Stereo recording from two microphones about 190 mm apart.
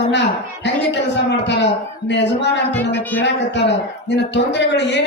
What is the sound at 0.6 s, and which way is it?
A man's voice, 65° left (ahead or behind).